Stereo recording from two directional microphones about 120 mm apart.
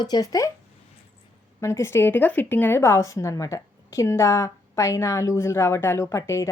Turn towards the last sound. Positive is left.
turn(degrees=25)  # may be behind; listen again after turning